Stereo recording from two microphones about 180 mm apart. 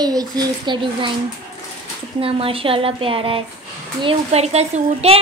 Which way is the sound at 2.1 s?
30° right (ahead or behind).